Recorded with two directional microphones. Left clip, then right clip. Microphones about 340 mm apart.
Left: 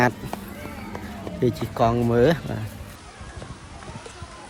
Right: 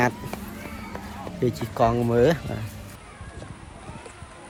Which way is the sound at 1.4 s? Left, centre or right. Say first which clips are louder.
Left 1 dB; centre.